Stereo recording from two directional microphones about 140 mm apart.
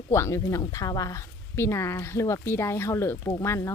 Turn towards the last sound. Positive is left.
turn(degrees=20)  # may be behind; listen again after turning